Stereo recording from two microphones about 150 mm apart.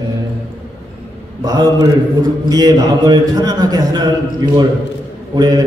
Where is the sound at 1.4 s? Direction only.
25° right (ahead or behind).